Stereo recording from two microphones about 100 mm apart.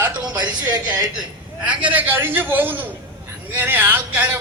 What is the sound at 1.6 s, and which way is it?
A man's voice, 15° right (ahead or behind).